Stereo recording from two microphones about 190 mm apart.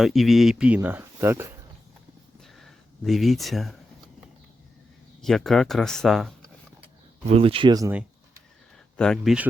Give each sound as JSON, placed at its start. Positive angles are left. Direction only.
{"t": 0.0, "sound": "speech", "side_deg": 0}
{"t": 2.4, "sound": "a sound", "side_deg": 0}
{"t": 5.2, "sound": "speech", "side_deg": 0}
{"t": 7.3, "sound": "speech", "side_deg": -30}
{"t": 9.0, "sound": "speech", "side_deg": 0}